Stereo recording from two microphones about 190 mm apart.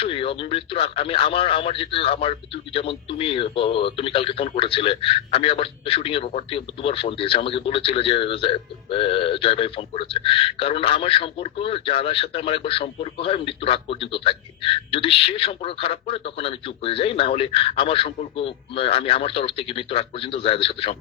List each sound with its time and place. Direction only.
0.0 s speech: 30° left (ahead or behind)